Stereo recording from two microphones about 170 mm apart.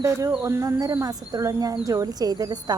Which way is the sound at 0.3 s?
15° right (ahead or behind).